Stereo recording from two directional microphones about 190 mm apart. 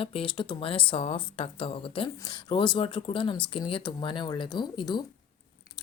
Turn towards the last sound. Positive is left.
turn(degrees=25)  # may be behind; listen again after turning